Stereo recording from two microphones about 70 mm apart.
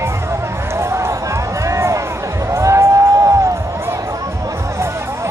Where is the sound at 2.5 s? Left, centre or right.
Right.